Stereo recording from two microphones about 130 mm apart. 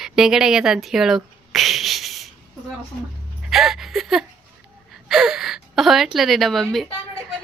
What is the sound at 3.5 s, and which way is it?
Speech, centre (ahead or behind).